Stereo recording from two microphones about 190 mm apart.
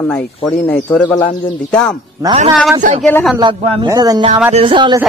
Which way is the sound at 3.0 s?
5° left (ahead or behind).